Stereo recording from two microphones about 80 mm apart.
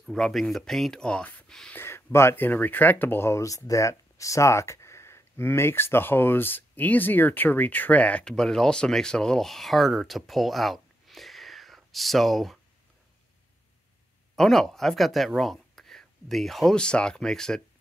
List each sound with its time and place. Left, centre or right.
0.1 s speech: centre
1.8 s a sound: left
2.1 s speech: left; by 12.5 s centre
14.3 s speech: centre